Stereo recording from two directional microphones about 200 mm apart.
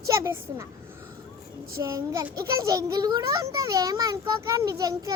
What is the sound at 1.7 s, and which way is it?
A child's voice, 15° right (ahead or behind).